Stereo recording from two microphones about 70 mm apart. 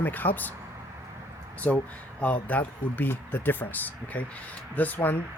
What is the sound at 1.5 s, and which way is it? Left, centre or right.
Speech, left.